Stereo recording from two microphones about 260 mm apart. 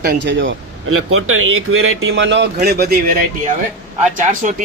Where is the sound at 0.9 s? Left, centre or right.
Right.